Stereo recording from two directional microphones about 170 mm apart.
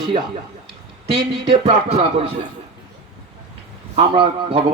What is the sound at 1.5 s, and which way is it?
Speech, 40° right (ahead or behind).